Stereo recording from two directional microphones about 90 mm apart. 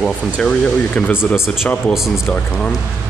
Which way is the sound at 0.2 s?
10° left (ahead or behind).